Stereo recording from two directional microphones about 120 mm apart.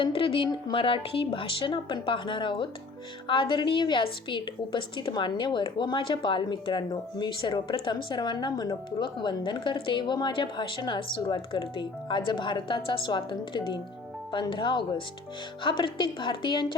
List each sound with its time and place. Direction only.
0.0 s a woman's voice: 45° left (ahead or behind)